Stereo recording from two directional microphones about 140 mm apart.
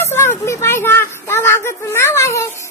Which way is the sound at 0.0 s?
15° left (ahead or behind).